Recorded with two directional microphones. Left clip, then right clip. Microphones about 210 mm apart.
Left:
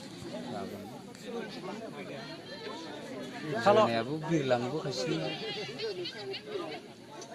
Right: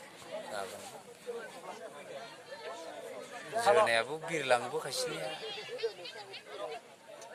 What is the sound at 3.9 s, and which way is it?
Speech, 35° right (ahead or behind).